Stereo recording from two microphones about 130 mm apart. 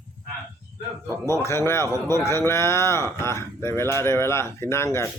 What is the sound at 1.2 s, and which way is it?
Speech, 20° left (ahead or behind).